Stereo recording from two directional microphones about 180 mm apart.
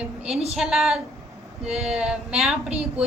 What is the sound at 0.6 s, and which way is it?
Speech, centre (ahead or behind).